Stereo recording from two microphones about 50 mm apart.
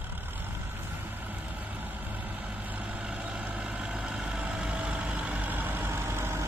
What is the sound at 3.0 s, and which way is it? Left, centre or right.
Vehicle, right.